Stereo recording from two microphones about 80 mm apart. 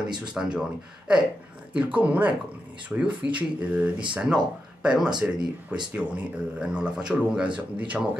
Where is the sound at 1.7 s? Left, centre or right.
Centre.